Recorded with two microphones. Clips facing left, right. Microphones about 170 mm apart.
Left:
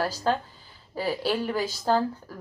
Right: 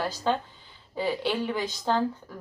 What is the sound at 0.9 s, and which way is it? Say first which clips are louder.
A woman's voice: left 1 dB; 5° left (ahead or behind).